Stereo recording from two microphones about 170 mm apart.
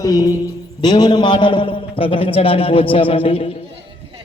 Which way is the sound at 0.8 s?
25° left (ahead or behind).